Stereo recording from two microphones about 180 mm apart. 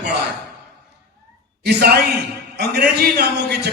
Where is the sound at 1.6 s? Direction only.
55° right (ahead or behind).